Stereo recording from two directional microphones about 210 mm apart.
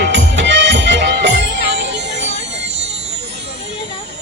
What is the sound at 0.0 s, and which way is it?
Music, 60° right (ahead or behind).